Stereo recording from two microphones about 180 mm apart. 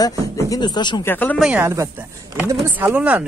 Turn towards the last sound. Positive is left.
turn(degrees=-10)  # may be behind; listen again after turning